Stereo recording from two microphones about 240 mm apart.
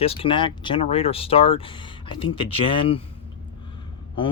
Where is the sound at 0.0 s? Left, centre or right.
Left.